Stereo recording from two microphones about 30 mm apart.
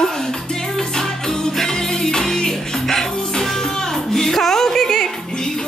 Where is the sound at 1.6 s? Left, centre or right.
Centre.